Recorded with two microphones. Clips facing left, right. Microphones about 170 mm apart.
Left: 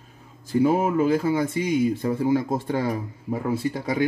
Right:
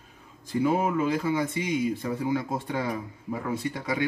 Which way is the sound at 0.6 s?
40° left (ahead or behind).